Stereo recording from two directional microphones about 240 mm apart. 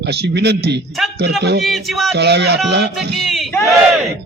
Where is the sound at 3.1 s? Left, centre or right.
Centre.